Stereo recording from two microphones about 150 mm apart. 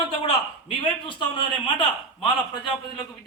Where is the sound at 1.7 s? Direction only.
30° left (ahead or behind).